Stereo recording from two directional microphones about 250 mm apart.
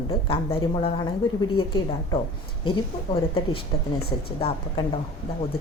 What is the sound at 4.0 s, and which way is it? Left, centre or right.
Speech, left.